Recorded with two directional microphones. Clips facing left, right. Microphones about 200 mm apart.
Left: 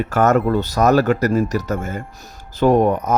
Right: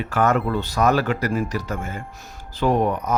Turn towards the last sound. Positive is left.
turn(degrees=45)  # may be behind; listen again after turning